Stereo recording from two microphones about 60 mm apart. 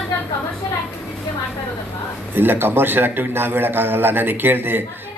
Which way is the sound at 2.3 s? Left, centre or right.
Right.